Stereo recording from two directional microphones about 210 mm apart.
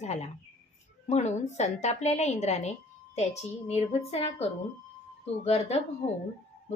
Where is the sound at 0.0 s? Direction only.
35° left (ahead or behind).